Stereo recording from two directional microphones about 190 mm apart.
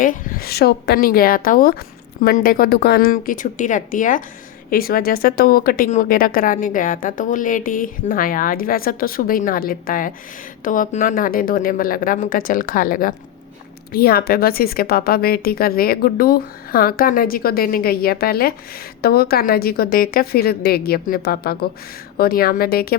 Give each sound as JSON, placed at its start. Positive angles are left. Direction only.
{"t": 0.0, "sound": "a woman's voice", "side_deg": 45}